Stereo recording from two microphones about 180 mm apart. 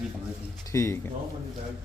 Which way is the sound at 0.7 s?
15° left (ahead or behind).